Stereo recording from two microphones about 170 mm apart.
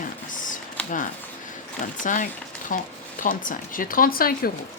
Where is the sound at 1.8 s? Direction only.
50° left (ahead or behind).